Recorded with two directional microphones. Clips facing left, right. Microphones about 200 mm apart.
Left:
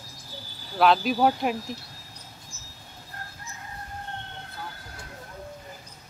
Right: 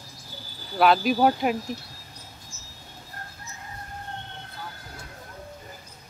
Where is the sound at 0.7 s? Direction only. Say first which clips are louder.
Right 1 dB; 5° right (ahead or behind).